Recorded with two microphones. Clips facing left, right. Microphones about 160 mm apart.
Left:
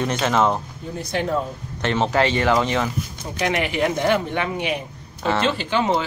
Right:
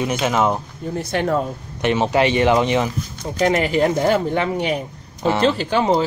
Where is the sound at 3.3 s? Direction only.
40° right (ahead or behind).